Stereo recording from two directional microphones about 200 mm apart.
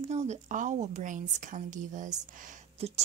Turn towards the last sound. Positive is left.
turn(degrees=-30)  # may be behind; listen again after turning